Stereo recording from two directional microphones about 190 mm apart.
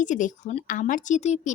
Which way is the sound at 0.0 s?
40° left (ahead or behind).